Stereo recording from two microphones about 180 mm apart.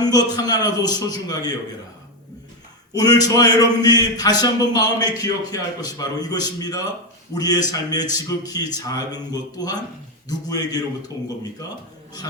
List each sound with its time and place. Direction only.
0.0 s a man's voice: 20° left (ahead or behind)
2.9 s a man's voice: 20° left (ahead or behind)